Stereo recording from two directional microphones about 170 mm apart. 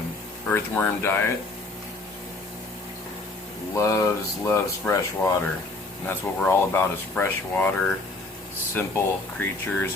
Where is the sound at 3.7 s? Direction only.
15° left (ahead or behind).